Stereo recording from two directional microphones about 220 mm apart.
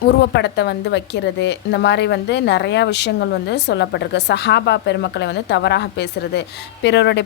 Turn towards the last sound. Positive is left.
turn(degrees=50)  # may be behind; listen again after turning